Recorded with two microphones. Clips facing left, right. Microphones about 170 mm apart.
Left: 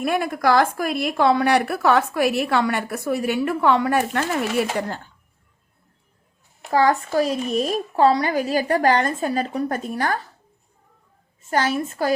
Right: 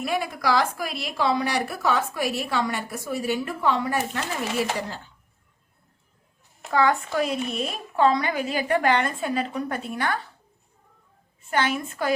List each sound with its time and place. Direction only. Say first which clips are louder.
0.0 s a woman's voice: left 5 dB; 55° left (ahead or behind)
6.7 s speech: left 3 dB; 35° left (ahead or behind)
11.5 s speech: left 3 dB; 35° left (ahead or behind)